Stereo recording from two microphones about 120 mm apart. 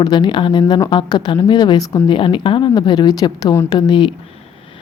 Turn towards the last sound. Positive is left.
turn(degrees=45)  # may be behind; listen again after turning